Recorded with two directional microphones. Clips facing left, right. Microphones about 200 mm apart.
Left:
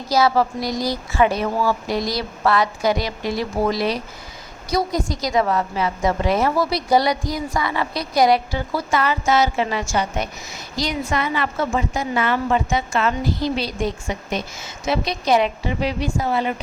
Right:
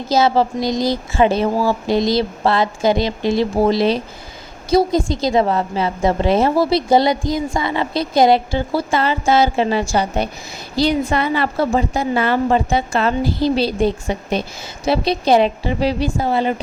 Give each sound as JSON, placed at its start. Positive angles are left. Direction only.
{"t": 0.1, "sound": "a woman's voice", "side_deg": -25}